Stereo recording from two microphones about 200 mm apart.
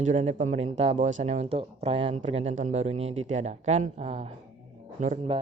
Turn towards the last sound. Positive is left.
turn(degrees=-35)  # may be behind; listen again after turning